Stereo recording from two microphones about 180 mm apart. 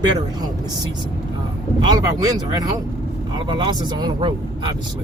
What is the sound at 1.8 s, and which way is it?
Speech, 20° right (ahead or behind).